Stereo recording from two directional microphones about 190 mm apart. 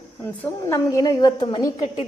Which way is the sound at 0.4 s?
15° left (ahead or behind).